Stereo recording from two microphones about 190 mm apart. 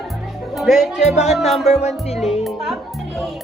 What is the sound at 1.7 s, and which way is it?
Music, 35° left (ahead or behind).